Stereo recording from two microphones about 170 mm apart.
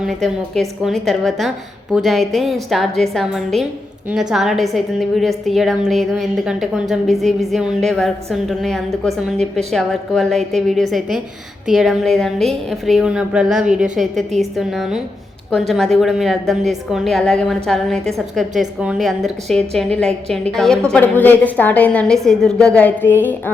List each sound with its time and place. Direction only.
0.0 s a woman's voice: centre (ahead or behind)